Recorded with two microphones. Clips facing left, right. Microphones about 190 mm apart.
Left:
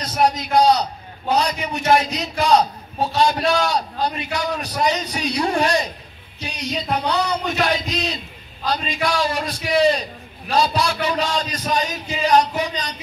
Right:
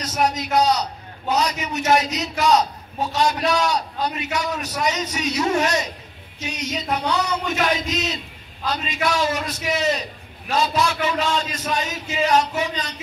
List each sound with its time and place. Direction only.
0.0 s a man's voice: 30° left (ahead or behind)